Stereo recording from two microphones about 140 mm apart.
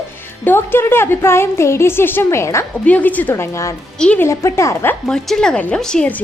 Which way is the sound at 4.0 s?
10° left (ahead or behind).